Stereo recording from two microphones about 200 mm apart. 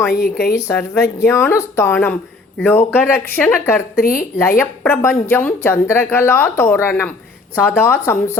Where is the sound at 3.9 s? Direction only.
45° left (ahead or behind).